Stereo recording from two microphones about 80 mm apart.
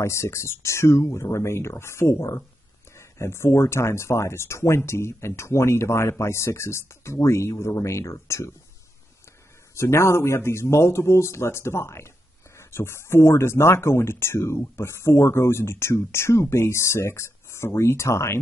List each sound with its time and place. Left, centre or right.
0.0 s speech: left
9.8 s speech: left